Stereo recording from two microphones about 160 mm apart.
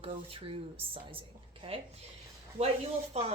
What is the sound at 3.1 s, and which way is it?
Speech, 40° right (ahead or behind).